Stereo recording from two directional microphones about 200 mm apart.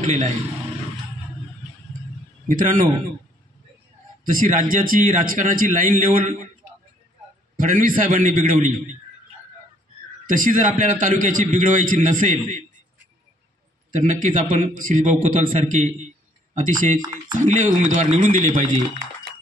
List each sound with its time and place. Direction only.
0.0 s a man's voice: 35° right (ahead or behind)
2.4 s a man's voice: 45° right (ahead or behind)
4.2 s speech: 45° right (ahead or behind)
7.5 s speech: 45° right (ahead or behind)
10.2 s a man's voice: 40° right (ahead or behind)
13.9 s a man's voice: 40° right (ahead or behind)